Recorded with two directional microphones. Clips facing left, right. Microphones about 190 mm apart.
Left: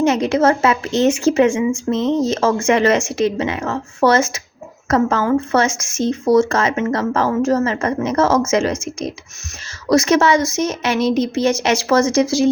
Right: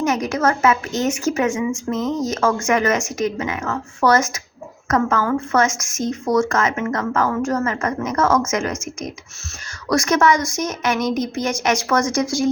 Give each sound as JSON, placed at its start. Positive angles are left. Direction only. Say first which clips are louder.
{"t": 0.0, "sound": "a woman's voice", "louder": "left 5 dB", "side_deg": 30}